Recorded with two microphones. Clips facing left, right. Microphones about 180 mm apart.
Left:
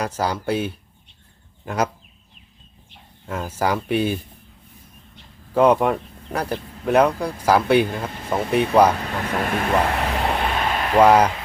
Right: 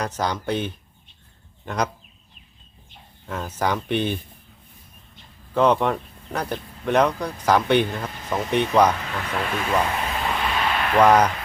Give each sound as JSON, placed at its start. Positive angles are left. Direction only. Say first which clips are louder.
{"t": 0.0, "sound": "speech", "louder": "left 2 dB", "side_deg": 10}
{"t": 3.2, "sound": "speech", "louder": "left 2 dB", "side_deg": 10}
{"t": 5.5, "sound": "speech", "louder": "left 3 dB", "side_deg": 10}
{"t": 9.4, "sound": "a sound", "louder": "left 2 dB", "side_deg": 55}
{"t": 10.9, "sound": "speech", "louder": "left 2 dB", "side_deg": 10}